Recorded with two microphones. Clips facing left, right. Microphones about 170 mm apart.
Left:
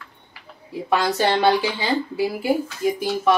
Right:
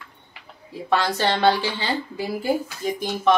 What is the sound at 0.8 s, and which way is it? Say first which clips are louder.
A woman's voice: left 2 dB; 10° left (ahead or behind).